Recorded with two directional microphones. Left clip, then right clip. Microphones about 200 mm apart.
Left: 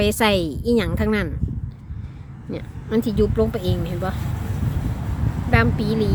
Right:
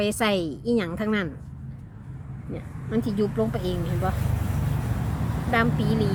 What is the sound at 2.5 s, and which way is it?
A woman's voice, 40° left (ahead or behind).